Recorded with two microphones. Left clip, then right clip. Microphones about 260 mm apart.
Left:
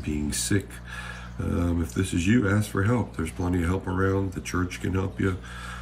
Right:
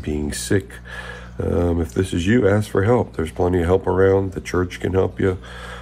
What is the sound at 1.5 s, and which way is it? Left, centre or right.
Speech, right.